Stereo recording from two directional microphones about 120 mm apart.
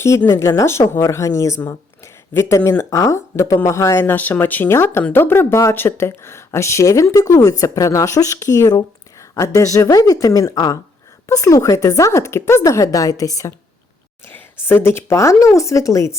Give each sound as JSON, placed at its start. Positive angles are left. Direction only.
{"t": 0.2, "sound": "speech", "side_deg": 20}